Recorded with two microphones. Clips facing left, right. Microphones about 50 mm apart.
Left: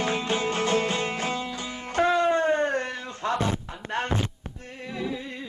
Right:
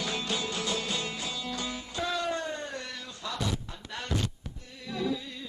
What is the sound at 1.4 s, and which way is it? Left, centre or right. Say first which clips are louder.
Music: left 2 dB; left.